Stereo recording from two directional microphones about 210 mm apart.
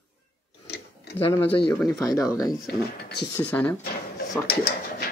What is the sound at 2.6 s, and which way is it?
Speech, 50° left (ahead or behind).